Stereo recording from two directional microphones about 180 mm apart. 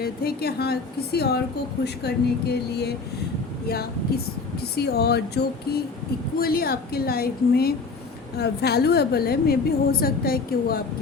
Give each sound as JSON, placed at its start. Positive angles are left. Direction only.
{"t": 0.0, "sound": "a woman's voice", "side_deg": 60}
{"t": 4.7, "sound": "a woman's voice", "side_deg": 60}